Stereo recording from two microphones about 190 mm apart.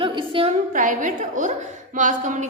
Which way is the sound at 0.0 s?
25° right (ahead or behind).